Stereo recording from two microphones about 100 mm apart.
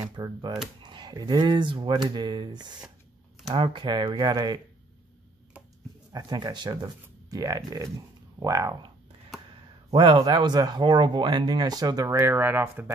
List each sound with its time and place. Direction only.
0.0 s speech: 45° right (ahead or behind)
3.4 s speech: 60° right (ahead or behind); by 4.6 s 40° right (ahead or behind)
6.1 s speech: 40° right (ahead or behind)
10.1 s speech: 40° right (ahead or behind)
12.2 s speech: 20° right (ahead or behind)